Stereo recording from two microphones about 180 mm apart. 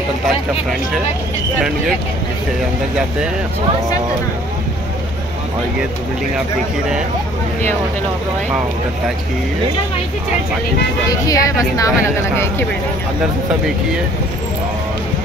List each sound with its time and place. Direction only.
11.1 s a woman's voice: 20° left (ahead or behind)